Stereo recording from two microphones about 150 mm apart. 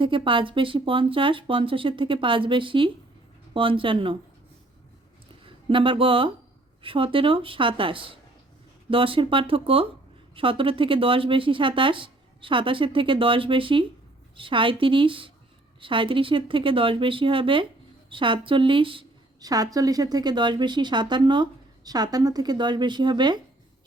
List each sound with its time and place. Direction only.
0.0 s a woman's voice: 35° right (ahead or behind)
5.6 s a woman's voice: 35° right (ahead or behind)